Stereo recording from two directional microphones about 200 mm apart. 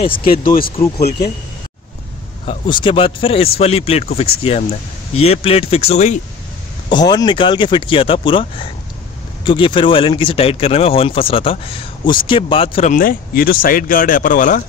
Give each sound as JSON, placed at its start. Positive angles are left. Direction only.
{"t": 0.0, "sound": "speech", "side_deg": 25}
{"t": 0.4, "sound": "speech", "side_deg": 45}
{"t": 2.4, "sound": "speech", "side_deg": 25}
{"t": 6.9, "sound": "speech", "side_deg": 20}
{"t": 12.9, "sound": "speech", "side_deg": 45}